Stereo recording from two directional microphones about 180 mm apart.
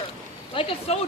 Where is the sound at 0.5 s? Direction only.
30° left (ahead or behind).